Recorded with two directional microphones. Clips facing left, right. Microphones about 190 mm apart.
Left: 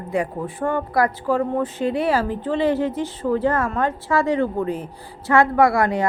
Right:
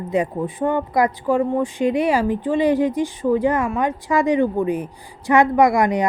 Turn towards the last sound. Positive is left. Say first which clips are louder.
# right 2 dB
turn(degrees=-15)  # may be behind; listen again after turning